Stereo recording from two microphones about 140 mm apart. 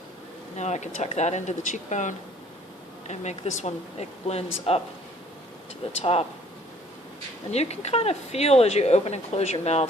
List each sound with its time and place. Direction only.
0.5 s speech: 55° left (ahead or behind)
6.0 s speech: 45° left (ahead or behind)
7.5 s speech: 50° left (ahead or behind)